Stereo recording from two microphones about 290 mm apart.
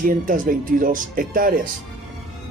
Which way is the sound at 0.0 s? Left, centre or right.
Right.